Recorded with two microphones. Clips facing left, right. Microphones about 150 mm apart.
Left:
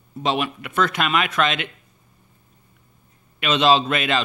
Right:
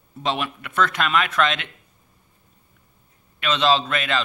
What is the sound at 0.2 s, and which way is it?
Speech, 5° left (ahead or behind).